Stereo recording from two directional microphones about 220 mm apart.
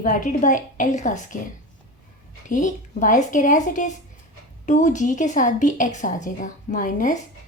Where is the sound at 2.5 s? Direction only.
35° left (ahead or behind).